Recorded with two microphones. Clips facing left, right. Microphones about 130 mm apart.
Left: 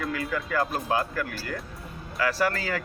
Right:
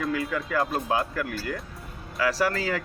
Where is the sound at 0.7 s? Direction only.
25° right (ahead or behind).